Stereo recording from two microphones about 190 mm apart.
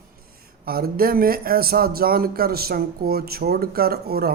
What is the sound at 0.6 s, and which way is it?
Speech, 50° right (ahead or behind).